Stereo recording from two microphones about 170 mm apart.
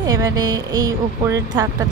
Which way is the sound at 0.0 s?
20° right (ahead or behind).